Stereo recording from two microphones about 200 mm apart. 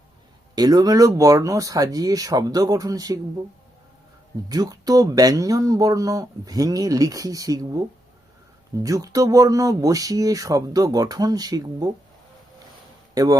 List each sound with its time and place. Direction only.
0.5 s speech: 20° right (ahead or behind)
4.4 s speech: 20° right (ahead or behind)
8.8 s speech: 15° right (ahead or behind)